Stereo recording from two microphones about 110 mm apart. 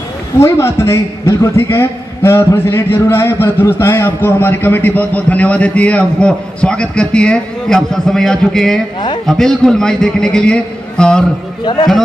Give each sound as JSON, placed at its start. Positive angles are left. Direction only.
{"t": 0.4, "sound": "a man's voice", "side_deg": 25}